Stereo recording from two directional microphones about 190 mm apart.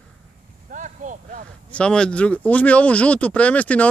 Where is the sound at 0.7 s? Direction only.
40° right (ahead or behind).